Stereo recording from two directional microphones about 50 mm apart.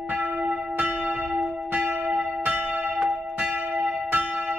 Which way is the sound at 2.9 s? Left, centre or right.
Centre.